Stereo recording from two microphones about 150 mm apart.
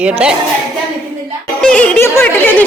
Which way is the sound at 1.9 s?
15° left (ahead or behind).